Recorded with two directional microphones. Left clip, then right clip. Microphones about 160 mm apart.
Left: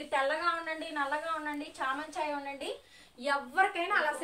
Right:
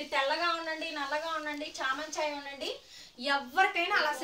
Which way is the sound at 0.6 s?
25° right (ahead or behind).